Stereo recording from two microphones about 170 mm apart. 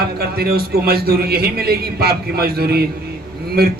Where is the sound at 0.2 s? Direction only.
65° right (ahead or behind).